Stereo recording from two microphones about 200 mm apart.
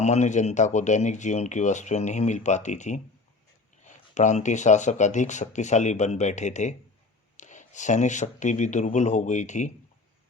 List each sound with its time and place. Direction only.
0.0 s speech: 35° left (ahead or behind)